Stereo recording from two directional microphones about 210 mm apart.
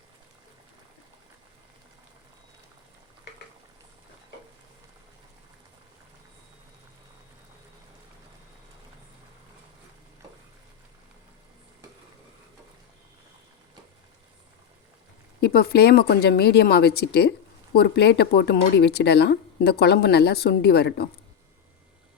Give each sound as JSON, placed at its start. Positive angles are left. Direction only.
{"t": 15.4, "sound": "speech", "side_deg": 50}